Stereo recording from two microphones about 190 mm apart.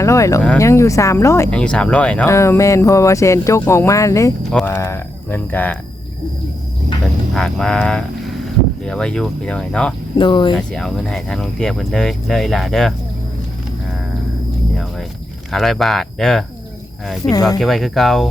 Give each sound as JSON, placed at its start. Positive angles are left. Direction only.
{"t": 0.0, "sound": "speech", "side_deg": 15}
{"t": 7.3, "sound": "speech", "side_deg": 5}
{"t": 10.2, "sound": "speech", "side_deg": 25}
{"t": 10.5, "sound": "speech", "side_deg": 0}
{"t": 15.5, "sound": "speech", "side_deg": 0}
{"t": 17.6, "sound": "speech", "side_deg": 0}